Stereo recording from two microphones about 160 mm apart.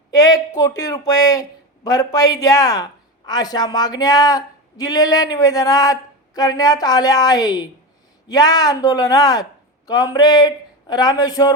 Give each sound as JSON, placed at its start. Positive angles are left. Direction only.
{"t": 0.1, "sound": "a woman's voice", "side_deg": 20}